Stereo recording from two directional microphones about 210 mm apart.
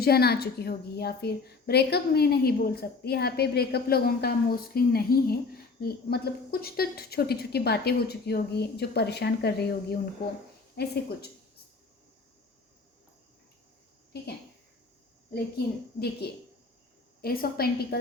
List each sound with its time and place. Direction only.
0.0 s a woman's voice: 50° left (ahead or behind)
10.8 s a woman's voice: 50° left (ahead or behind)
15.5 s a woman's voice: 50° left (ahead or behind)